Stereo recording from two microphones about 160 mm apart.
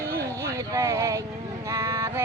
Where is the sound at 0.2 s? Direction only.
20° right (ahead or behind).